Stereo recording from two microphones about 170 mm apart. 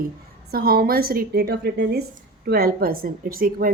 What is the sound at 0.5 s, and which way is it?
A woman's voice, 65° right (ahead or behind).